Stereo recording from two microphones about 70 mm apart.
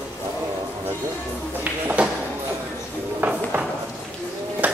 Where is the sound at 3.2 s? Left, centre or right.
Right.